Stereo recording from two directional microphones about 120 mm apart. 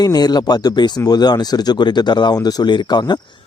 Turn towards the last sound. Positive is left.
turn(degrees=35)  # may be behind; listen again after turning